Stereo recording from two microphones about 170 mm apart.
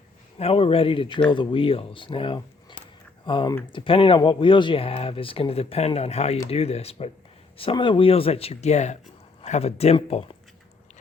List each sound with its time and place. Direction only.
0.3 s speech: 35° left (ahead or behind)